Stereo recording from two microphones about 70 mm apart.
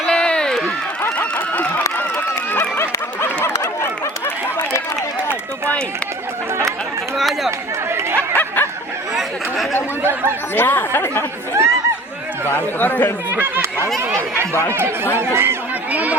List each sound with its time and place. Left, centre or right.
0.0 s run: centre
1.0 s a sound: left
7.2 s run: centre
7.9 s chatter: right
10.0 s chatter: right
10.5 s speech: left
11.6 s chatter: right
12.5 s speech: left
13.3 s speech: right
14.7 s speech: right
15.9 s speech: right